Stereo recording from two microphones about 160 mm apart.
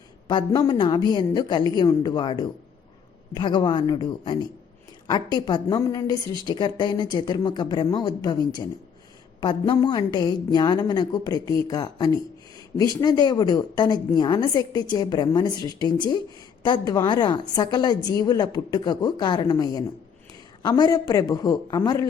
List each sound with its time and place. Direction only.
0.3 s a woman's voice: 25° left (ahead or behind)